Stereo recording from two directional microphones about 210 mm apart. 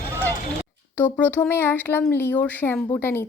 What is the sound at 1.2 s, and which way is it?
Speech, 10° left (ahead or behind).